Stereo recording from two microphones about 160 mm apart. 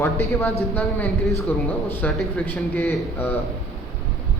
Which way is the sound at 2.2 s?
10° left (ahead or behind).